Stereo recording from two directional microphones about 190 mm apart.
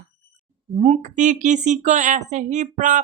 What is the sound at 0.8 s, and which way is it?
Speech, 35° right (ahead or behind).